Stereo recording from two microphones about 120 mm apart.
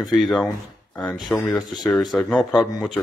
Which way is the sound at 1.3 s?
15° left (ahead or behind).